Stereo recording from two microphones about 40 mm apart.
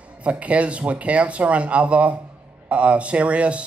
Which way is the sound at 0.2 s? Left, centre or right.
Right.